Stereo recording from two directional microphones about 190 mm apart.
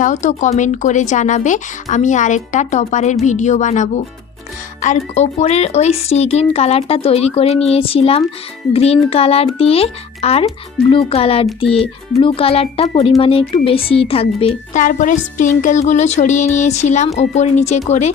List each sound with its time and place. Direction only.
0.0 s a child's voice: 40° left (ahead or behind)